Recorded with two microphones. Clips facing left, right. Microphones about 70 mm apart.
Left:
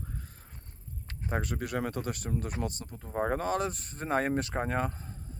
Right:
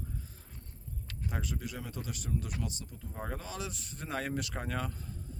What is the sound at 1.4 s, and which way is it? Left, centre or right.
Speech, left.